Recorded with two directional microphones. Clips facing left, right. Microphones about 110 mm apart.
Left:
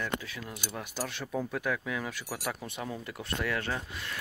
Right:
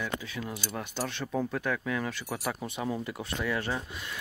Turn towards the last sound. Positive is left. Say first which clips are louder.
# right 1 dB
turn(degrees=-10)  # may be behind; listen again after turning